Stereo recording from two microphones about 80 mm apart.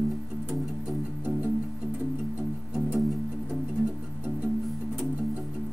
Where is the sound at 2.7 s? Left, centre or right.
Centre.